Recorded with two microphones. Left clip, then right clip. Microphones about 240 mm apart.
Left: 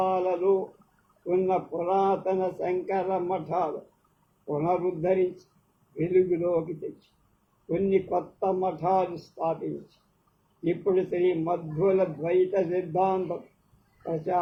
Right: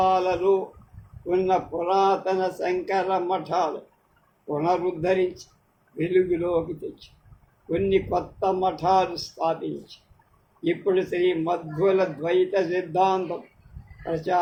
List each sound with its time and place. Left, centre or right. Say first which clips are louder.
0.0 s a sound: right 4 dB; right
1.3 s speech: right 3 dB; right
10.6 s speech: right 2 dB; right